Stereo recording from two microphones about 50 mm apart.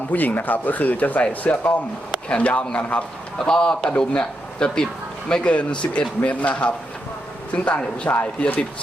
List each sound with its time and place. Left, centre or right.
0.1 s speech: left
3.3 s speech: centre